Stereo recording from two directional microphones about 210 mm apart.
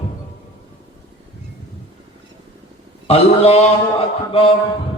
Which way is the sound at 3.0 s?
30° left (ahead or behind).